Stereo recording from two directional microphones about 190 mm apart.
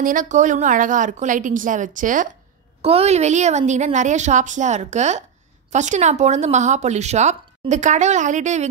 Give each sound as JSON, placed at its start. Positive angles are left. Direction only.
{"t": 0.0, "sound": "a woman's voice", "side_deg": -45}
{"t": 2.8, "sound": "speech", "side_deg": -30}